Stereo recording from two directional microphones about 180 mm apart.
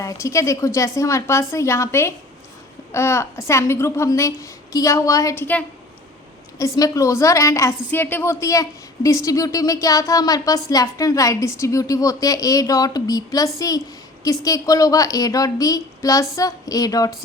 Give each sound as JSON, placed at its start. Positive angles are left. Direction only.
{"t": 0.0, "sound": "a woman's voice", "side_deg": 20}
{"t": 6.7, "sound": "a woman's voice", "side_deg": 20}